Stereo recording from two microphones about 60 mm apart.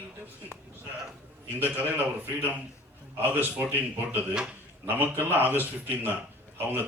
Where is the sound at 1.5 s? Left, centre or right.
Right.